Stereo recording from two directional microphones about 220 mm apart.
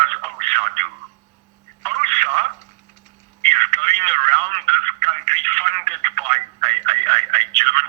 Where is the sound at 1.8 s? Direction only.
35° right (ahead or behind).